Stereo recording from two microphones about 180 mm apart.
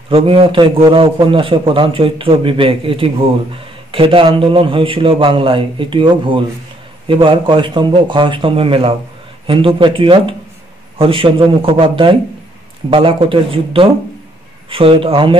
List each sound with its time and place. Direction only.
0.1 s a man's voice: 30° right (ahead or behind)